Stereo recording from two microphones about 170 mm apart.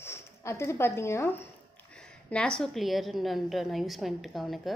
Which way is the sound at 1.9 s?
5° left (ahead or behind).